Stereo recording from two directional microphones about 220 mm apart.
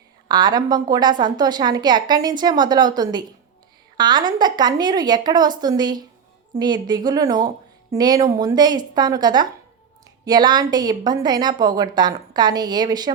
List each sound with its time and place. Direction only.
0.3 s a woman's voice: 20° right (ahead or behind)